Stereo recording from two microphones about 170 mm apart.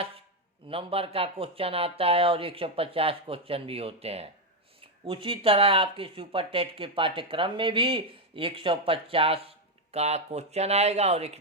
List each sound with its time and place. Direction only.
0.7 s speech: 35° right (ahead or behind)